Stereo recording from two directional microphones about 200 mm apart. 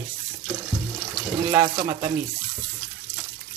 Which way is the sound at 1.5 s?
15° right (ahead or behind).